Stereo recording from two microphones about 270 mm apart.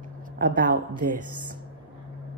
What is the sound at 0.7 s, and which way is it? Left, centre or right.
Speech, right.